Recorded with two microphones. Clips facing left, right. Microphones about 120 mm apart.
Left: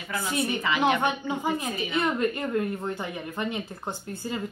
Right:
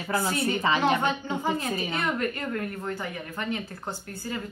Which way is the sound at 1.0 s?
15° left (ahead or behind).